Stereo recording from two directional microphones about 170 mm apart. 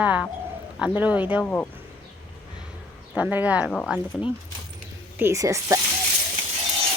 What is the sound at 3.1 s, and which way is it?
Speech, 10° right (ahead or behind).